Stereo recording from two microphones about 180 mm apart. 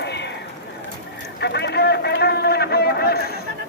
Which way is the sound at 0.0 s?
70° left (ahead or behind).